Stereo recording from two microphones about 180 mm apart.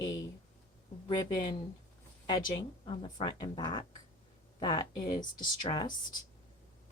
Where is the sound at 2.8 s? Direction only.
30° left (ahead or behind).